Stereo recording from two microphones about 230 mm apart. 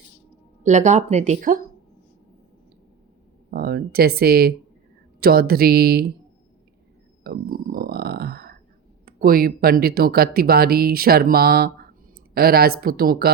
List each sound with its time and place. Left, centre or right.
0.6 s speech: right
3.5 s speech: right
7.3 s a sound: right
9.0 s speech: right